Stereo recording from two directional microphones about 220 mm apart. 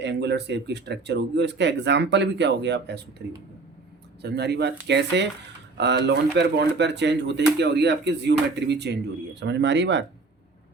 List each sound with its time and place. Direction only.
0.0 s speech: 50° right (ahead or behind)